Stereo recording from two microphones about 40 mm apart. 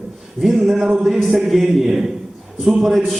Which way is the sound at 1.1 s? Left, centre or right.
Centre.